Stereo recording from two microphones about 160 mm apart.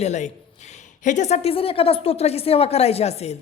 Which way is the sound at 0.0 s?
45° left (ahead or behind).